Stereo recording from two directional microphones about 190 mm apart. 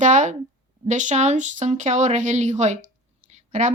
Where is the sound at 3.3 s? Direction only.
40° right (ahead or behind).